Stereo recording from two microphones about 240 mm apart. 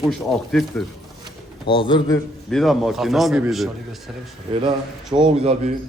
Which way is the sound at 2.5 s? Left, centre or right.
Centre.